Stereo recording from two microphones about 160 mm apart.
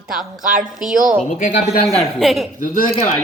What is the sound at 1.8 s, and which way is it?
Speech, centre (ahead or behind).